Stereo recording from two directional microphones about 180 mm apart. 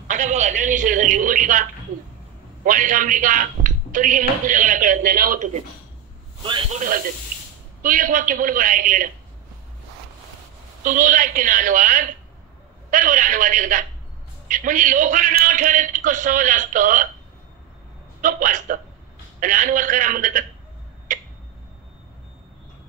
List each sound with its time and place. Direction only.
0.1 s a man's voice: 40° right (ahead or behind)
7.8 s a man's voice: 50° right (ahead or behind)
10.8 s a man's voice: 45° right (ahead or behind)
18.2 s a man's voice: 45° right (ahead or behind)
21.1 s a sound: 45° right (ahead or behind)